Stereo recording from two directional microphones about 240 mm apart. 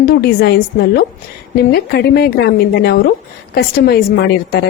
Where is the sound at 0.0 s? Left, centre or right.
Left.